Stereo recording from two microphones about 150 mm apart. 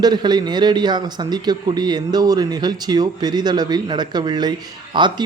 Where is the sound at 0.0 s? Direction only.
30° right (ahead or behind).